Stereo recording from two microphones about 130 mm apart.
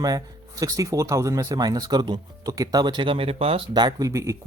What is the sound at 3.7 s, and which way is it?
Speech, 30° right (ahead or behind).